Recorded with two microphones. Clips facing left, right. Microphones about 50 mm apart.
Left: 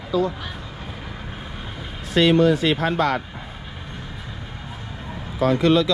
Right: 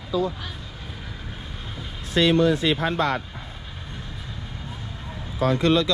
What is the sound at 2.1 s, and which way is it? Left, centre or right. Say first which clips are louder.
Speech: left 3 dB; left.